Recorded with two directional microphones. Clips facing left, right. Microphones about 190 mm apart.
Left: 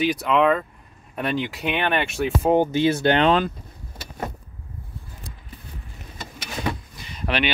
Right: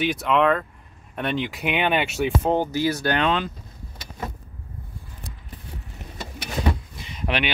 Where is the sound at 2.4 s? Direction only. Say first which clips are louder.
Left 7 dB; 15° left (ahead or behind).